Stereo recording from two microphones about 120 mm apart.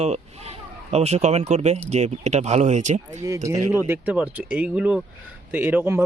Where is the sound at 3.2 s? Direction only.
25° right (ahead or behind).